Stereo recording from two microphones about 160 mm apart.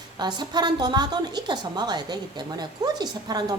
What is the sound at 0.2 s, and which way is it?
Speech, 25° right (ahead or behind).